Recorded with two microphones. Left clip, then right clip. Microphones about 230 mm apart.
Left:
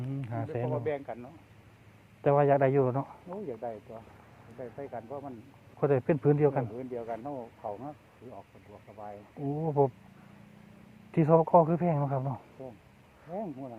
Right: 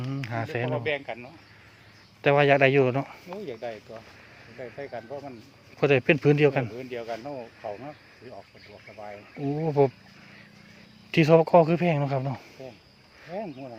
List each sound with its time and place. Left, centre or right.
0.1 s a sound: right
1.0 s speech: centre
2.2 s speech: right
3.4 s speech: right
4.8 s speech: right
5.8 s speech: right
6.7 s speech: right
9.4 s speech: right
11.1 s speech: right
13.3 s speech: centre